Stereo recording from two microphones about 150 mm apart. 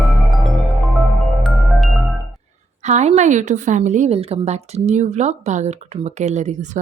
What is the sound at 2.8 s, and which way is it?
A woman's voice, 50° right (ahead or behind).